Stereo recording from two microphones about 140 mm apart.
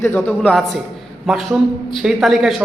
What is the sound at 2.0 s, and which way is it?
Speech, centre (ahead or behind).